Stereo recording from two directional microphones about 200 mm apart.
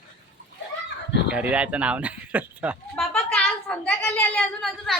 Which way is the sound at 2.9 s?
5° left (ahead or behind).